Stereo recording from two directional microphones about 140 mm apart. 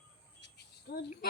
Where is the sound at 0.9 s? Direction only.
90° left.